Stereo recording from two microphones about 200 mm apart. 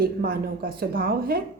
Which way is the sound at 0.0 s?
50° right (ahead or behind).